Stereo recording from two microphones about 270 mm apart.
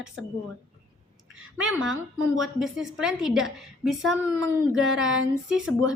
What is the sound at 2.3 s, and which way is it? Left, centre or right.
A woman's voice, centre.